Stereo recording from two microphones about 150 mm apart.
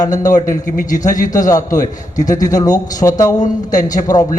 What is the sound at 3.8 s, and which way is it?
Speech, 60° left (ahead or behind).